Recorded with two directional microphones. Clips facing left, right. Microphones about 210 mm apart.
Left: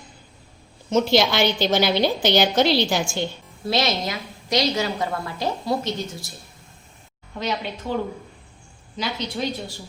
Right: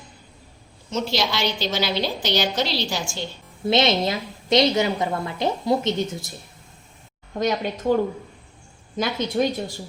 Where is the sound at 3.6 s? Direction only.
20° right (ahead or behind).